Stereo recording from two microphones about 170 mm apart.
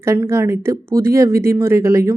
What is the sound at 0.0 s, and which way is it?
Speech, 15° right (ahead or behind).